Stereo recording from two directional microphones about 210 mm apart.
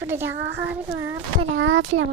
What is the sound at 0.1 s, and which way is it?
A child's voice, 10° right (ahead or behind).